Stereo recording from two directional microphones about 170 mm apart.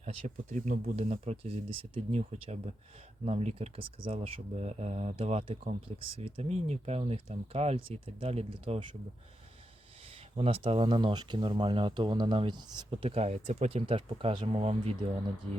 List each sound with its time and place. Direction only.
0.0 s speech: 45° right (ahead or behind)
0.9 s speech: 40° right (ahead or behind)
10.3 s speech: 35° right (ahead or behind)